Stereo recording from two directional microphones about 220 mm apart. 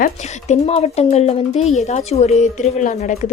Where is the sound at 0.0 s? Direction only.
30° left (ahead or behind).